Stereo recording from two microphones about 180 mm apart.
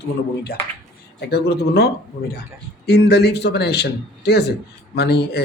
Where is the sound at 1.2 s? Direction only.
60° left (ahead or behind).